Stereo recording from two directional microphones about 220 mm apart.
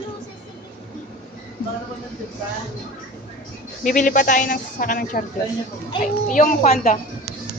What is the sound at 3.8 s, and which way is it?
Speech, 35° left (ahead or behind).